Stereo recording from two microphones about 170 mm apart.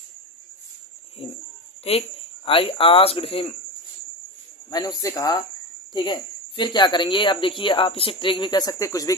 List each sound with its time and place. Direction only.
1.2 s speech: 35° left (ahead or behind)
4.7 s speech: 20° left (ahead or behind)